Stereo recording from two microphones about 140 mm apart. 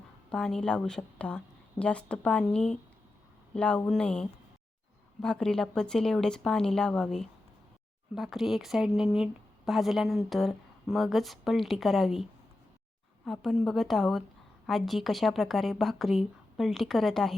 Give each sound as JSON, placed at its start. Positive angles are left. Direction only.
{"t": 0.3, "sound": "a woman's voice", "side_deg": 5}